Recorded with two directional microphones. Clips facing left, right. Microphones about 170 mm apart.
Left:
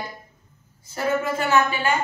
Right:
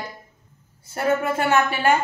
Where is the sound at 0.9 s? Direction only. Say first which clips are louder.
Right 2 dB; 55° right (ahead or behind).